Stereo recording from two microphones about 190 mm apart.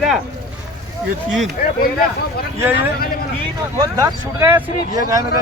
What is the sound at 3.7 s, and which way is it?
Speech, 15° right (ahead or behind).